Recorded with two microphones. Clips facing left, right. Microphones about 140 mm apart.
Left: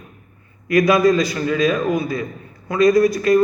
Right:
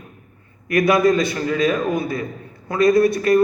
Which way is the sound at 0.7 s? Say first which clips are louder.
Left 1 dB; 25° right (ahead or behind).